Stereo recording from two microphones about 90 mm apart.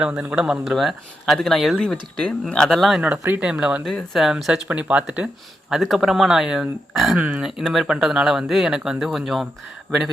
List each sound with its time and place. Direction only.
0.2 s speech: 10° right (ahead or behind)
3.0 s speech: 20° right (ahead or behind)
5.7 s speech: centre (ahead or behind)
7.2 s speech: 20° right (ahead or behind)
7.4 s speech: centre (ahead or behind)